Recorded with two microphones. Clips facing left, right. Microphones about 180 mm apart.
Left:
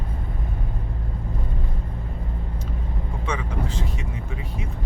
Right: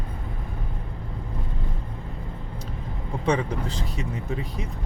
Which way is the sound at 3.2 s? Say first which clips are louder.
Right 7 dB; 35° right (ahead or behind).